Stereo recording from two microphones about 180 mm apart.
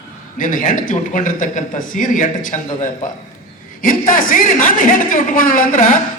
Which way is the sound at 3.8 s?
50° left (ahead or behind).